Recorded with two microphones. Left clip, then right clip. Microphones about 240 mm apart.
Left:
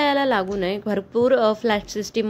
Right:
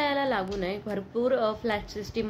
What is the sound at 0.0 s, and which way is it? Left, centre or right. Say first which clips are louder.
A woman's voice: left 7 dB; left.